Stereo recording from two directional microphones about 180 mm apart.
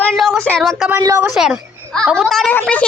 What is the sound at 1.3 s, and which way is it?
A woman's voice, 5° right (ahead or behind).